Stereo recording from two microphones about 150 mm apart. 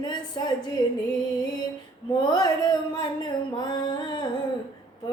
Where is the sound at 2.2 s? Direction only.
25° left (ahead or behind).